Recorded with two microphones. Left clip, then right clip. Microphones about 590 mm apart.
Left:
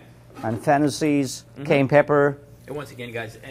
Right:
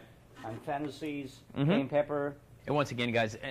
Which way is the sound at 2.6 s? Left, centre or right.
Right.